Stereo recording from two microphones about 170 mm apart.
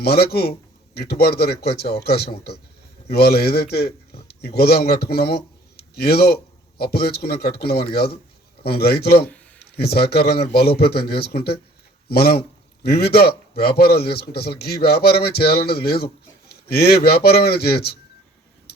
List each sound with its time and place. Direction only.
0.0 s a man's voice: 65° left (ahead or behind)